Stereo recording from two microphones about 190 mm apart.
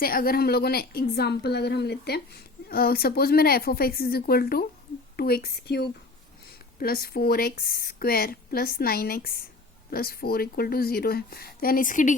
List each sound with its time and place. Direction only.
0.0 s a woman's voice: 50° left (ahead or behind)